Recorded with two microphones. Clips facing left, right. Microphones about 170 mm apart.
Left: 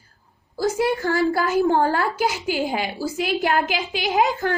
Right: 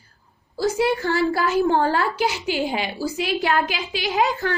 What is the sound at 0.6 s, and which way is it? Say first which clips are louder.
A woman's voice: even; 45° left (ahead or behind).